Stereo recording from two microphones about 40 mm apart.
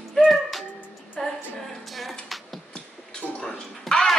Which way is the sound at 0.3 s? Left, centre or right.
Centre.